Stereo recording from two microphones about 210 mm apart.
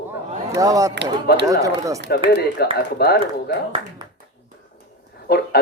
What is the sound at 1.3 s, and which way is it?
Speech, 50° left (ahead or behind).